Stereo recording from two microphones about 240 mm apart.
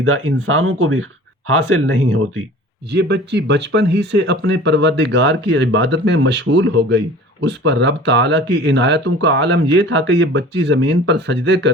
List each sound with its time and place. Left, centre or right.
0.0 s speech: right
2.9 s speech: right